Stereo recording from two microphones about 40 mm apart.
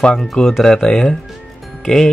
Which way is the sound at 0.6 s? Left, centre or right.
Centre.